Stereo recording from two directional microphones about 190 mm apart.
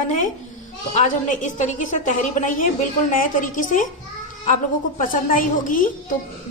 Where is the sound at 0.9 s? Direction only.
40° left (ahead or behind).